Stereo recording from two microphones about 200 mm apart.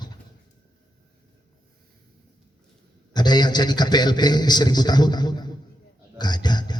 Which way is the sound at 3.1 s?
20° left (ahead or behind).